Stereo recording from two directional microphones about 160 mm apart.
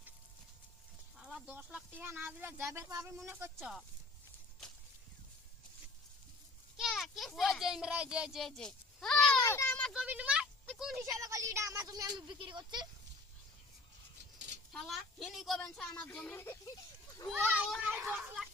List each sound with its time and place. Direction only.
1.2 s a sound: 5° right (ahead or behind)
2.0 s speech: 10° right (ahead or behind)
3.6 s a woman's voice: centre (ahead or behind)
6.7 s speech: centre (ahead or behind)
9.4 s a child's voice: 20° left (ahead or behind)
9.6 s a sound: 10° left (ahead or behind)
9.9 s speech: 5° right (ahead or behind)
10.7 s a sound: centre (ahead or behind)
11.2 s speech: 20° right (ahead or behind)
14.7 s a woman's voice: centre (ahead or behind)
17.3 s speech: 10° right (ahead or behind)